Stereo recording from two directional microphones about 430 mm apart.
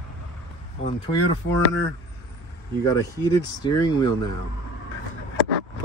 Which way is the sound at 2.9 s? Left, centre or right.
Centre.